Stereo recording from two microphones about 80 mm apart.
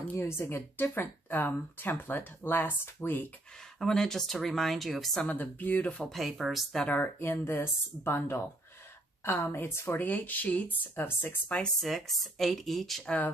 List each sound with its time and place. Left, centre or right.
0.1 s speech: left
3.8 s speech: centre
5.3 s speech: left
6.0 s speech: centre
6.9 s speech: left
11.4 s speech: centre
11.8 s speech: centre